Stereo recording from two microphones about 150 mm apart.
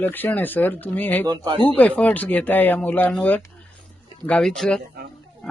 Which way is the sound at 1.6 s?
10° left (ahead or behind).